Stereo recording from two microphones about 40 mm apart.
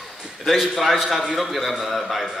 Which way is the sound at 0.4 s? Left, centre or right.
Centre.